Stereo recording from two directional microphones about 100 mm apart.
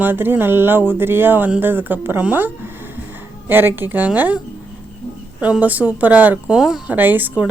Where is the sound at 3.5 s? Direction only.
20° right (ahead or behind).